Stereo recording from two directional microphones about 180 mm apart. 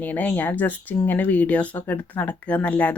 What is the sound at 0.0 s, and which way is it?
Speech, 10° left (ahead or behind).